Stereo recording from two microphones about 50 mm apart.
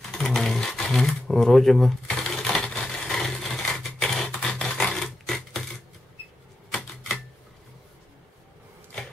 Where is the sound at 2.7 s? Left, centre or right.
Centre.